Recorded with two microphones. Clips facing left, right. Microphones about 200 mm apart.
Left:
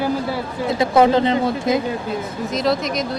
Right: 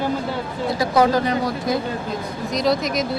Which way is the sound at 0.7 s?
25° left (ahead or behind).